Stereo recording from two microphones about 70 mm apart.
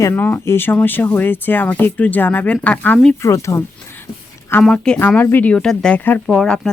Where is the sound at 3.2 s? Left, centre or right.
Left.